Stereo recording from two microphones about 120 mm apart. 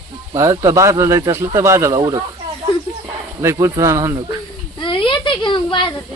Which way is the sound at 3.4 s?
25° right (ahead or behind).